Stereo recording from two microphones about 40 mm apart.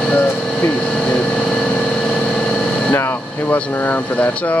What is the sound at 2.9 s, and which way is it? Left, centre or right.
Speech, left.